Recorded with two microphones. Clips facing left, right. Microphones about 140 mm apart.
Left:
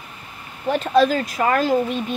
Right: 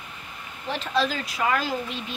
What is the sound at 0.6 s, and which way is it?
Speech, 45° left (ahead or behind).